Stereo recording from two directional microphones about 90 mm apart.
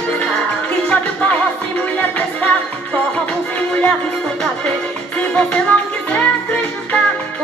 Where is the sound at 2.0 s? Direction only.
20° left (ahead or behind).